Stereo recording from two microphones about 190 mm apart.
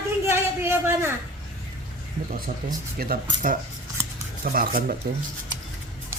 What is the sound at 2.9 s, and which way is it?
Speech, 50° right (ahead or behind).